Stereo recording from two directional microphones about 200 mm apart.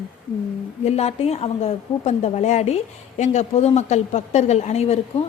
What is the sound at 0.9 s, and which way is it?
A woman's voice, 30° left (ahead or behind).